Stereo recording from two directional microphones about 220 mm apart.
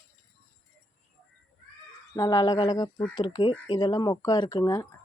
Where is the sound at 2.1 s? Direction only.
15° left (ahead or behind).